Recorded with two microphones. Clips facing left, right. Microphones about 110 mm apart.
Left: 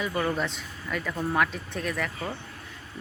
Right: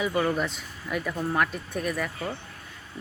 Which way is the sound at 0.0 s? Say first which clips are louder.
Right 2 dB; 5° right (ahead or behind).